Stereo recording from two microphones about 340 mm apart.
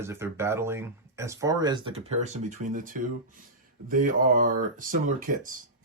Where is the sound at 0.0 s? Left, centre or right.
Centre.